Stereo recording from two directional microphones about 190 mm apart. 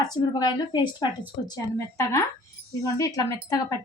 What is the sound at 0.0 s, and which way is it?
A woman's voice, 20° left (ahead or behind).